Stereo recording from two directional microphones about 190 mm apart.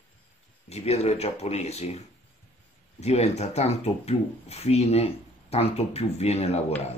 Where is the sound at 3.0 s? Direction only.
35° left (ahead or behind).